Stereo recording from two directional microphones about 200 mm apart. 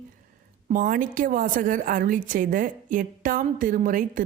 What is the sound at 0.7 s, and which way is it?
A woman's voice, 45° right (ahead or behind).